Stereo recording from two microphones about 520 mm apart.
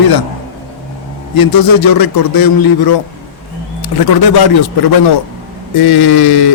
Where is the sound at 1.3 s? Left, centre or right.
Left.